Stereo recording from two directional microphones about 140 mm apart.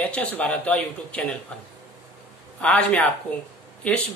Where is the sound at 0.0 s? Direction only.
10° left (ahead or behind).